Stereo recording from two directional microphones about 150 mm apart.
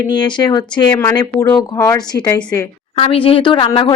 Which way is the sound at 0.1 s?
30° left (ahead or behind).